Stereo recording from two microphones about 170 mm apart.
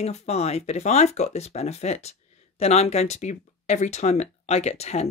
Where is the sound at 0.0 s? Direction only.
40° left (ahead or behind).